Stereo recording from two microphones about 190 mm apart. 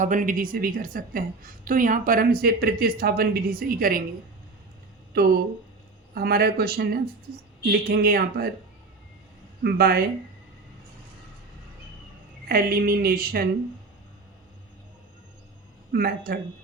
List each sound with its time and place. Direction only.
0.0 s a woman's voice: 40° right (ahead or behind)
5.1 s a woman's voice: 55° right (ahead or behind)
9.6 s speech: 55° right (ahead or behind)
12.5 s a woman's voice: 50° right (ahead or behind)
15.9 s a woman's voice: 50° right (ahead or behind)